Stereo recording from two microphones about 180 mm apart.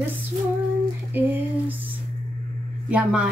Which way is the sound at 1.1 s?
10° right (ahead or behind).